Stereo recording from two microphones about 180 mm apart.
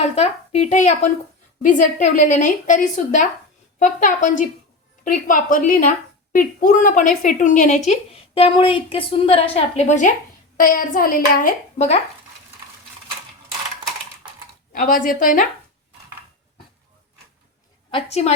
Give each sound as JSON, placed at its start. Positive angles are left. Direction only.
{"t": 0.0, "sound": "a woman's voice", "side_deg": 35}
{"t": 10.6, "sound": "a woman's voice", "side_deg": 50}
{"t": 14.7, "sound": "a woman's voice", "side_deg": 50}
{"t": 17.9, "sound": "a woman's voice", "side_deg": 35}